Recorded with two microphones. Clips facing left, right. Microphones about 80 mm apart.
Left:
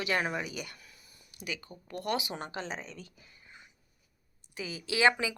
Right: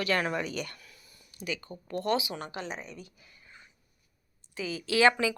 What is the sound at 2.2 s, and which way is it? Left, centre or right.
Speech, left.